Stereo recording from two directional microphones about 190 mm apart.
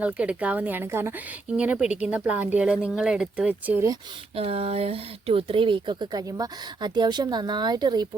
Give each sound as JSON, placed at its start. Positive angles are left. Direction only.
{"t": 0.0, "sound": "speech", "side_deg": -5}
{"t": 4.4, "sound": "speech", "side_deg": -30}